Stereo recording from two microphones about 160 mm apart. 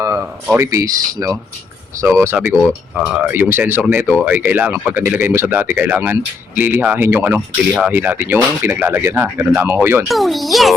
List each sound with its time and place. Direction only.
0.0 s a sound: 15° right (ahead or behind)
0.5 s speech: 20° right (ahead or behind)
10.1 s a child's voice: centre (ahead or behind)